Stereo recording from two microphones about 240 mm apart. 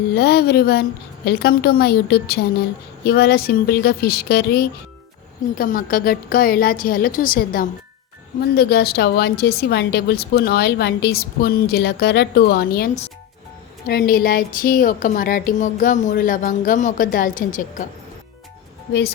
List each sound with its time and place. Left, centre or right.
0.1 s a woman's voice: left